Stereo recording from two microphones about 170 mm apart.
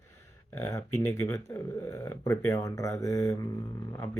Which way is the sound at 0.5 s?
15° left (ahead or behind).